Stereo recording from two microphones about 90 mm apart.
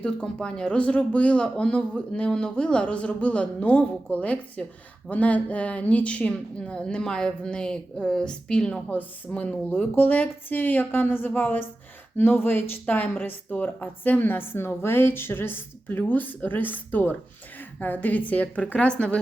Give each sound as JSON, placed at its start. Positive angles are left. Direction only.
{"t": 0.0, "sound": "speech", "side_deg": 10}